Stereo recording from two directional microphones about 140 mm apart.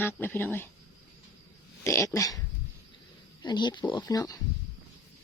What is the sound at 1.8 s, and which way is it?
Speech, 20° left (ahead or behind).